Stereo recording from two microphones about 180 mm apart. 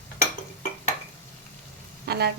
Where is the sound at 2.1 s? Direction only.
65° right (ahead or behind).